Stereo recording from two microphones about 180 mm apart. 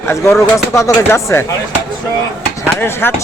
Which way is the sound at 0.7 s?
15° left (ahead or behind).